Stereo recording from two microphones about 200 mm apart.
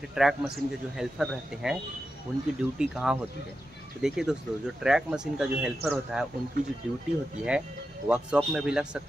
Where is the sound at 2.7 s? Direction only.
5° right (ahead or behind).